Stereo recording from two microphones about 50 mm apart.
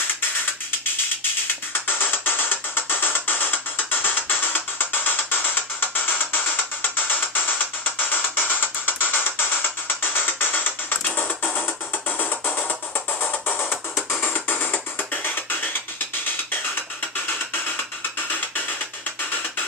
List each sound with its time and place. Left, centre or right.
1.9 s music: left
18.3 s music: left